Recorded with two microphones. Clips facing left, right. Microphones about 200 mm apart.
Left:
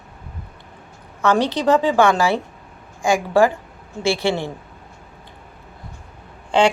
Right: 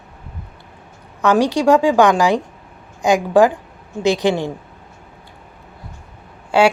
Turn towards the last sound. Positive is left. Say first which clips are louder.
# right 2 dB
turn(degrees=-10)  # may be behind; listen again after turning